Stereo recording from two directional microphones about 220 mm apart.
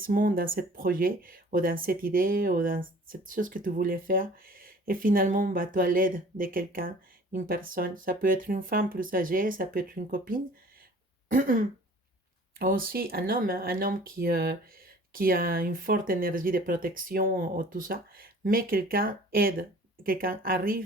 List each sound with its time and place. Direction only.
0.0 s speech: 40° right (ahead or behind)